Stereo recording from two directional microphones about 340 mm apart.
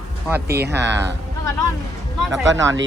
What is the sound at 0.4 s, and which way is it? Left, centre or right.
Speech, right.